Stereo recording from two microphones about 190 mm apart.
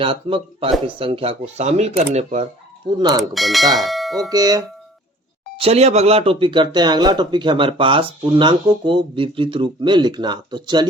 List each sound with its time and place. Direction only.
0.0 s speech: 30° right (ahead or behind)
3.0 s speech: 20° right (ahead or behind)
3.3 s speech: centre (ahead or behind)
3.8 s a sound: centre (ahead or behind)
4.3 s speech: 20° right (ahead or behind)
5.5 s speech: 30° right (ahead or behind)